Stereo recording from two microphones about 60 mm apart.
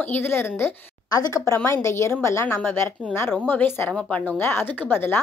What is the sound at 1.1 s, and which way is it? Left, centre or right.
Speech, left.